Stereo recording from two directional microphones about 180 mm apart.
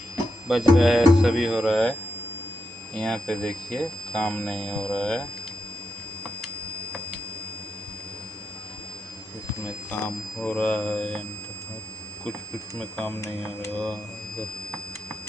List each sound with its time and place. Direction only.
0.4 s speech: centre (ahead or behind)
10.4 s mantra: 5° left (ahead or behind)
12.8 s speech: 5° left (ahead or behind)
13.2 s mantra: 10° left (ahead or behind)